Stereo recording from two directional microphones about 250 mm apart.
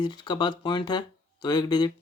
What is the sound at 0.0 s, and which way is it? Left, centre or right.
Speech, centre.